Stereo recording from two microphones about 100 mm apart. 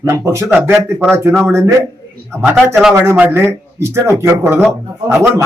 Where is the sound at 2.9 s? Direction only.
25° right (ahead or behind).